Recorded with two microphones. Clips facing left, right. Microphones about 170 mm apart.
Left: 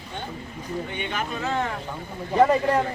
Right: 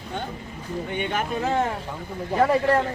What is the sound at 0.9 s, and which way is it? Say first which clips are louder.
Speech: right 4 dB; 50° right (ahead or behind).